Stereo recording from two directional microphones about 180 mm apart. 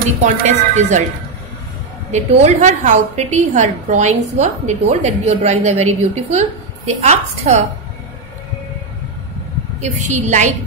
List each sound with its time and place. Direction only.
0.2 s a woman's voice: 40° right (ahead or behind)
2.1 s a woman's voice: 40° right (ahead or behind)
9.8 s a woman's voice: 40° right (ahead or behind)